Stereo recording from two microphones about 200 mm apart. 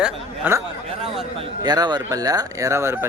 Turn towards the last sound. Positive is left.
turn(degrees=-15)  # may be behind; listen again after turning